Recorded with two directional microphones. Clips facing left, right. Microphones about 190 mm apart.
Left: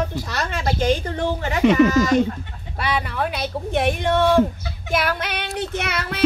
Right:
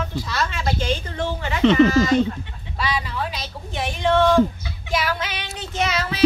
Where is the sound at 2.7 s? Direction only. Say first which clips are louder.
Left 2 dB; 55° left (ahead or behind).